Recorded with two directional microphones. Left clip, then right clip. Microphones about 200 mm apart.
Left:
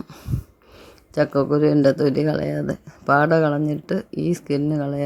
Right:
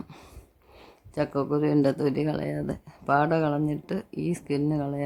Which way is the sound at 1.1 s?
10° left (ahead or behind).